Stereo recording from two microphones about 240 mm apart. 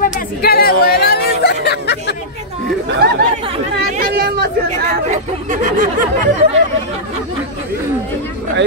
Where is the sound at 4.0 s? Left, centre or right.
Right.